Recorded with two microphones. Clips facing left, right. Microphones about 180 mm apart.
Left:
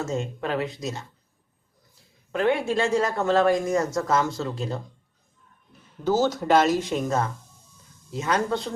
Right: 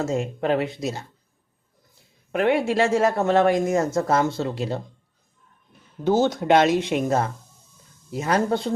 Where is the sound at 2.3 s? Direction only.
55° right (ahead or behind).